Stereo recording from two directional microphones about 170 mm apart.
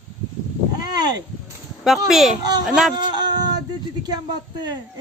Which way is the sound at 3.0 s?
25° right (ahead or behind).